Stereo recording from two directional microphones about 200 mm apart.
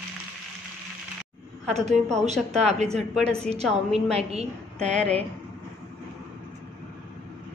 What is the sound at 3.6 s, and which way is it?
A woman's voice, centre (ahead or behind).